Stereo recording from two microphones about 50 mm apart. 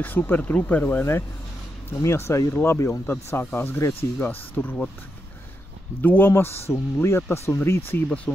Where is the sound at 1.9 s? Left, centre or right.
Left.